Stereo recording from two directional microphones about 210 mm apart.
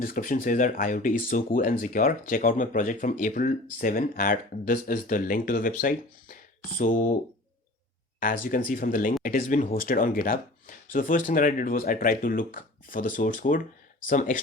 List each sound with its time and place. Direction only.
0.0 s speech: 40° left (ahead or behind)
8.2 s speech: 40° left (ahead or behind)